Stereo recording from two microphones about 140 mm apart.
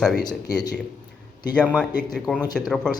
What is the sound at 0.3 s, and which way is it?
Speech, 30° left (ahead or behind).